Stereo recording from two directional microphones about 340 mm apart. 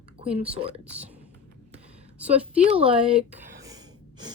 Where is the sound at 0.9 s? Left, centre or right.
Centre.